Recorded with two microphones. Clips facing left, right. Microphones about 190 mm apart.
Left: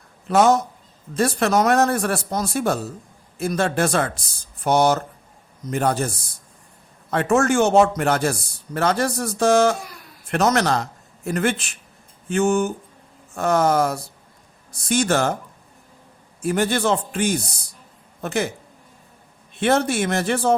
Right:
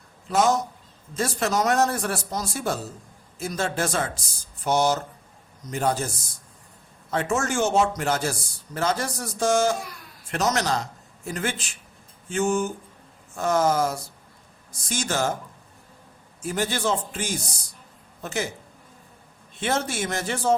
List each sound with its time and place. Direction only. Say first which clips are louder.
0.3 s a man's voice: left 5 dB; 65° left (ahead or behind)
7.1 s a man's voice: left 7 dB; 60° left (ahead or behind)
16.4 s a man's voice: left 6 dB; 60° left (ahead or behind)
19.5 s a man's voice: left 7 dB; 60° left (ahead or behind)